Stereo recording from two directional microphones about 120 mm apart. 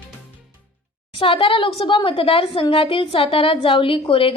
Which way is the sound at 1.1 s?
45° left (ahead or behind).